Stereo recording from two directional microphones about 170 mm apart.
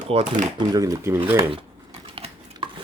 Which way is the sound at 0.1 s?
35° right (ahead or behind).